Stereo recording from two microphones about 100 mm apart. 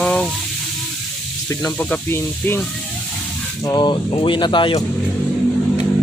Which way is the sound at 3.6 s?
45° left (ahead or behind).